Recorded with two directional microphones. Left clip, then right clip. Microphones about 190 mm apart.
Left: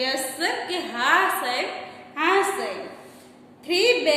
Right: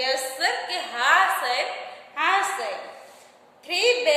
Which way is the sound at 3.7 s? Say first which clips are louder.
Left 1 dB; 10° right (ahead or behind).